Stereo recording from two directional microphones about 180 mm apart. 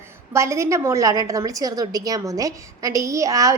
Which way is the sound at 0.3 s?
15° right (ahead or behind).